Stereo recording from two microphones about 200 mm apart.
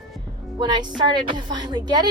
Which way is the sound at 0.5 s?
20° right (ahead or behind).